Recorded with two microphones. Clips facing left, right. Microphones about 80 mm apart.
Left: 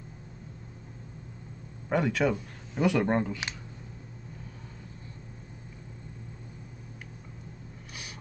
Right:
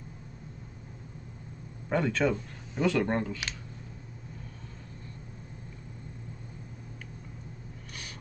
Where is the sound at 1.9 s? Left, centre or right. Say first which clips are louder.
Left 1 dB; centre.